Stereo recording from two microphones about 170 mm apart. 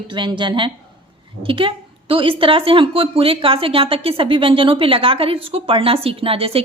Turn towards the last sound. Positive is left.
turn(degrees=-35)  # may be behind; listen again after turning